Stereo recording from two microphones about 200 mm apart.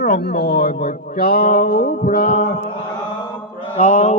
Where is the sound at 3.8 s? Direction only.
35° left (ahead or behind).